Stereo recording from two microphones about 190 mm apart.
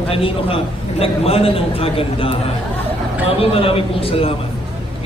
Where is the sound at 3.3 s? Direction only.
30° left (ahead or behind).